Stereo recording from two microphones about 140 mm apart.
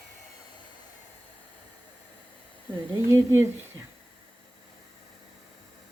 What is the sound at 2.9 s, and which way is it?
Speech, 20° right (ahead or behind).